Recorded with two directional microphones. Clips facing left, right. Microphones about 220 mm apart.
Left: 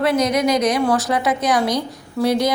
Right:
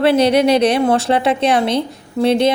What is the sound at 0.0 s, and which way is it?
A woman's voice, 30° right (ahead or behind).